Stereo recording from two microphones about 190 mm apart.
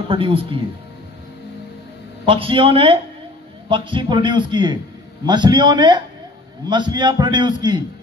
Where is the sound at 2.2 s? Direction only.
30° right (ahead or behind).